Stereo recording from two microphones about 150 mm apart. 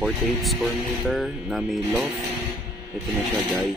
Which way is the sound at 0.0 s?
Centre (ahead or behind).